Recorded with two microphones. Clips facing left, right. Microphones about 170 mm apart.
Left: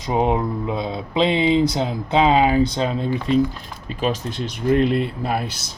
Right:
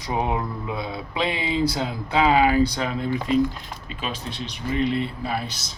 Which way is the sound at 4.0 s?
45° left (ahead or behind).